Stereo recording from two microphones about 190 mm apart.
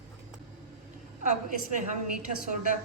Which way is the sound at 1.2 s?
40° right (ahead or behind).